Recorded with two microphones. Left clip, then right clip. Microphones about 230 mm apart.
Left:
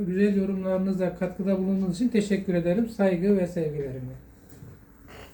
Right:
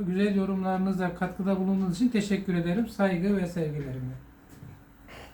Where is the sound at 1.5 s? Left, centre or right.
Right.